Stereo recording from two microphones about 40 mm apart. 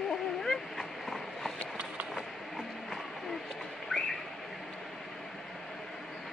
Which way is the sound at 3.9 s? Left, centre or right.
Centre.